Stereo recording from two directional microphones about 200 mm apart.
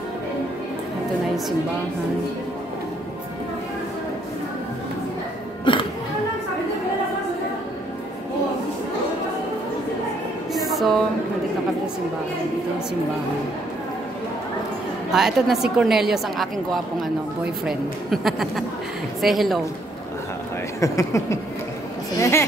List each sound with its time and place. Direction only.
5.7 s music: 25° left (ahead or behind)
10.5 s music: centre (ahead or behind)
15.0 s a woman's voice: centre (ahead or behind)
20.8 s speech: 15° left (ahead or behind)
22.2 s a sound: 15° left (ahead or behind)